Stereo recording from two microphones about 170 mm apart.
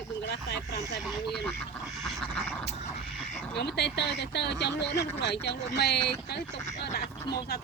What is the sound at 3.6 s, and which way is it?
Speech, 80° left.